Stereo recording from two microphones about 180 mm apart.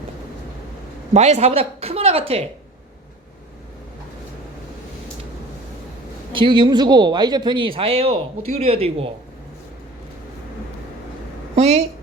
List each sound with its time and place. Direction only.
1.1 s speech: 35° right (ahead or behind)
6.3 s speech: 25° right (ahead or behind)
11.5 s a woman's voice: 35° right (ahead or behind)